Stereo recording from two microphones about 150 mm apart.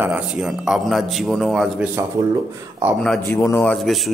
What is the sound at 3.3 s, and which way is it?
Speech, 15° left (ahead or behind).